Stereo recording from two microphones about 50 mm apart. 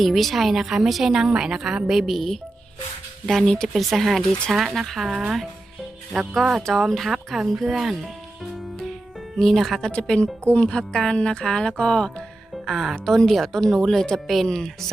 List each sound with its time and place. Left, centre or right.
0.0 s a woman's voice: centre
3.8 s a woman's voice: centre
6.3 s a woman's voice: centre
8.8 s music: centre
9.9 s a woman's voice: centre
12.6 s a woman's voice: centre